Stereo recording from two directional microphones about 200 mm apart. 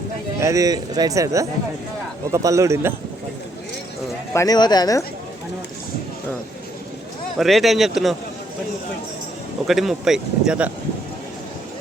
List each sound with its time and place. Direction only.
0.3 s speech: 15° right (ahead or behind)
4.4 s speech: 20° left (ahead or behind)
7.3 s speech: centre (ahead or behind)
9.6 s speech: centre (ahead or behind)